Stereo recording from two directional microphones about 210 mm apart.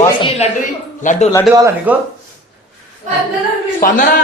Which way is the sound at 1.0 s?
35° left (ahead or behind).